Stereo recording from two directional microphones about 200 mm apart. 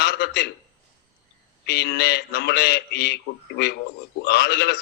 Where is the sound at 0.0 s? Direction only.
55° left (ahead or behind).